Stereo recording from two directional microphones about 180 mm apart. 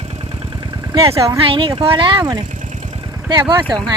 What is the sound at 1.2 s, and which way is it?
Speech, 25° right (ahead or behind).